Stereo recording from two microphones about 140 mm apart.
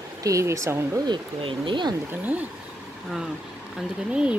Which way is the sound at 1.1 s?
35° right (ahead or behind).